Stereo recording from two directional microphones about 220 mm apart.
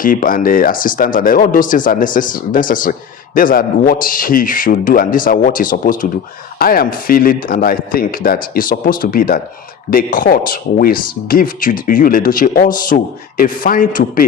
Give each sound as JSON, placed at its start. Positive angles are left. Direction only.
{"t": 0.0, "sound": "speech", "side_deg": 40}